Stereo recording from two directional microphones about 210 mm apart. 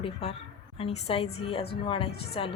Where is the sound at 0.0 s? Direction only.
30° left (ahead or behind).